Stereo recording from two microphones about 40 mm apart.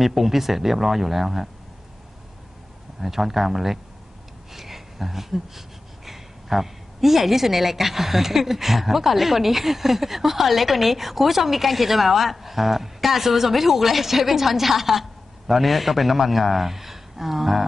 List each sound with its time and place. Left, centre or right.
0.0 s speech: centre
3.0 s speech: centre
4.6 s a sound: centre
6.0 s a woman's voice: centre